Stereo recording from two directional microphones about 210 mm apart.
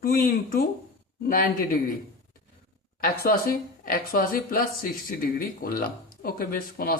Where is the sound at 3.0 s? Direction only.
45° left (ahead or behind).